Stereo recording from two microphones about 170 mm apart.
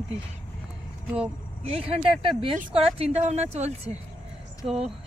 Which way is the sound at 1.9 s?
30° right (ahead or behind).